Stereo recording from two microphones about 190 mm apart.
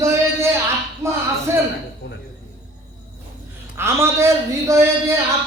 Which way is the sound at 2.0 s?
70° left (ahead or behind).